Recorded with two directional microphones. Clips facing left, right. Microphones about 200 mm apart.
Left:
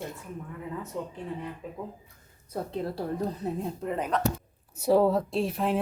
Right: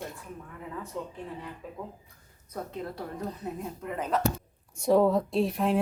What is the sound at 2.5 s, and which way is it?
Speech, 30° left (ahead or behind).